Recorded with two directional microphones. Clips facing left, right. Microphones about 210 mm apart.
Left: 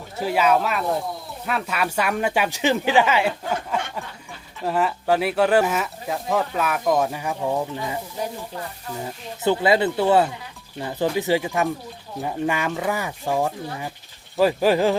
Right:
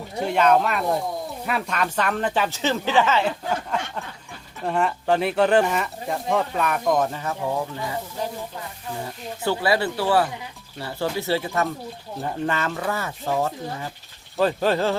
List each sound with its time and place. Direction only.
0.2 s speech: 5° left (ahead or behind)
9.4 s speech: 20° left (ahead or behind)